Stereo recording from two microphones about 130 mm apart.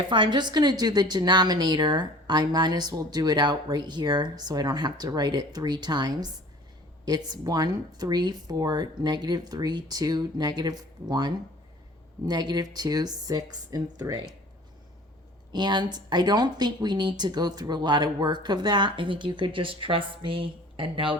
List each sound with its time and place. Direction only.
0.1 s a woman's voice: 35° right (ahead or behind)
15.5 s a woman's voice: 35° right (ahead or behind)